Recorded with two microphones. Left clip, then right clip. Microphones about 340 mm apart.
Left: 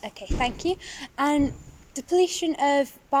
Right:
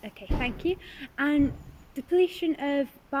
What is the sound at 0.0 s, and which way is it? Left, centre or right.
Speech, left.